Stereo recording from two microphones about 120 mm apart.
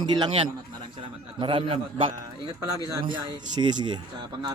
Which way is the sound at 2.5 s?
30° right (ahead or behind).